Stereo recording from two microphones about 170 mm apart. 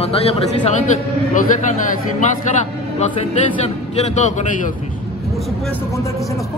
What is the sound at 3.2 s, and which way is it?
Speech, 40° left (ahead or behind).